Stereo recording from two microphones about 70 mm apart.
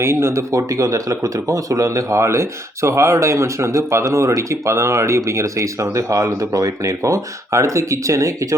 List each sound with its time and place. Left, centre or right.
0.0 s speech: right